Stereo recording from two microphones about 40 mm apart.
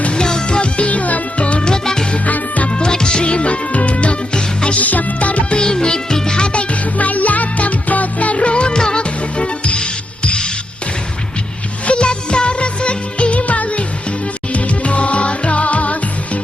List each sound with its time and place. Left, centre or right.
0.0 s music: left
2.1 s music: left
2.7 s music: left
4.8 s music: left
5.5 s music: left
11.9 s music: left